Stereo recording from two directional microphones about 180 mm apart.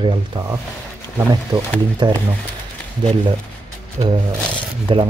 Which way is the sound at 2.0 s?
25° right (ahead or behind).